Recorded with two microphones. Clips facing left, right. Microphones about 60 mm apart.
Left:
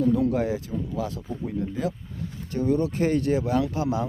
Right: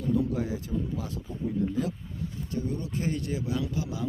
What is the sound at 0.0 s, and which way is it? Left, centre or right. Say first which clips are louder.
Speech: left 6 dB; left.